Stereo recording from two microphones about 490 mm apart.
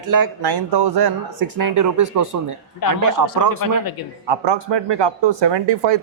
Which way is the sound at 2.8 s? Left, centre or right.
Left.